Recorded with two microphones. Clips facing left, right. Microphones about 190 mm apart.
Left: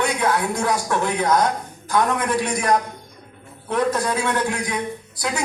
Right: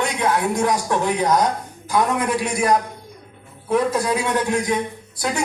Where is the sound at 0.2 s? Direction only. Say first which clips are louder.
Right 2 dB; 20° right (ahead or behind).